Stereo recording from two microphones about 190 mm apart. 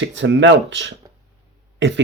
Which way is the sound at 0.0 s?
70° right (ahead or behind).